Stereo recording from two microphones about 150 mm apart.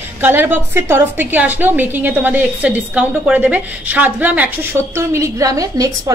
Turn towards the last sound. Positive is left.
turn(degrees=-25)  # may be behind; listen again after turning